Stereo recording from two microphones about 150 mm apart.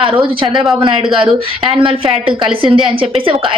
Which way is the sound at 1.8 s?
35° right (ahead or behind).